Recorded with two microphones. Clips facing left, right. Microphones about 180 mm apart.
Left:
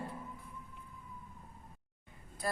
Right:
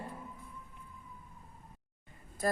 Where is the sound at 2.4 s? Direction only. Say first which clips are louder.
Right 5 dB; 45° right (ahead or behind).